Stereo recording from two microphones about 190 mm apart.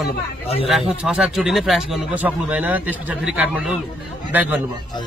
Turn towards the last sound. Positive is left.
turn(degrees=-10)  # may be behind; listen again after turning